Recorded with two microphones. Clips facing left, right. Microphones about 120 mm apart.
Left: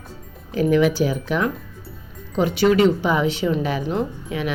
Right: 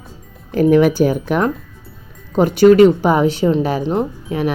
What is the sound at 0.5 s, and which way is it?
Speech, 50° right (ahead or behind).